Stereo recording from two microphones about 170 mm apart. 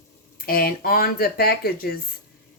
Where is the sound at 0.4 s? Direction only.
60° left (ahead or behind).